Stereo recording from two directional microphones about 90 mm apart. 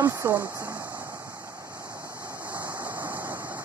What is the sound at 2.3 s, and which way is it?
Vehicle, 20° right (ahead or behind).